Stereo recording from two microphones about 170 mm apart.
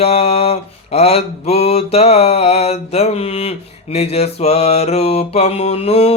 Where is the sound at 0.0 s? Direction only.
35° left (ahead or behind).